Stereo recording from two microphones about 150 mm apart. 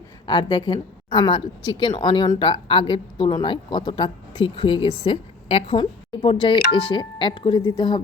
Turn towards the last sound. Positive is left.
turn(degrees=30)  # may be behind; listen again after turning